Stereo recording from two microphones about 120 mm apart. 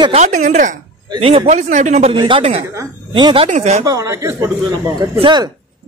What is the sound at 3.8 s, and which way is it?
Speech, 25° right (ahead or behind).